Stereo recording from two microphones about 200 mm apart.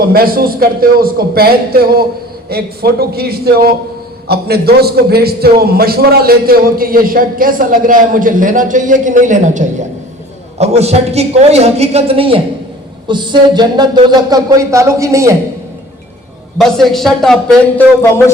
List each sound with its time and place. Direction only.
0.0 s a man's voice: 50° right (ahead or behind); by 15.4 s 15° right (ahead or behind)
16.6 s speech: centre (ahead or behind)